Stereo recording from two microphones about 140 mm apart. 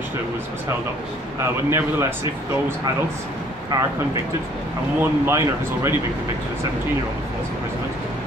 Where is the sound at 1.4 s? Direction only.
20° right (ahead or behind).